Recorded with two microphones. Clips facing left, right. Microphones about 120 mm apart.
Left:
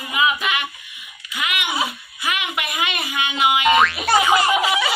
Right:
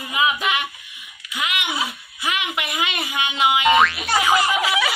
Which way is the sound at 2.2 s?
20° right (ahead or behind).